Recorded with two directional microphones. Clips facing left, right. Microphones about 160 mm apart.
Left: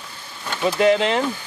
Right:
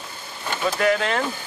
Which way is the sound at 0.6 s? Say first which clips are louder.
Left 4 dB; 20° left (ahead or behind).